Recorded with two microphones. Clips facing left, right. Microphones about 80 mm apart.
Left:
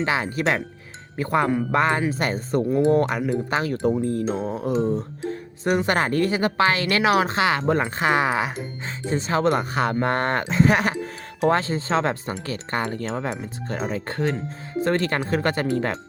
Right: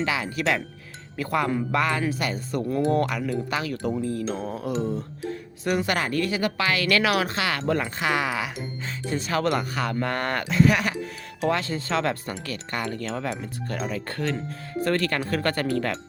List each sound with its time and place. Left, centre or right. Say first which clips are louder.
0.0 s speech: left 3 dB; left
2.6 s speech: left 4 dB; centre; by 4.3 s left
4.3 s speech: left 4 dB; left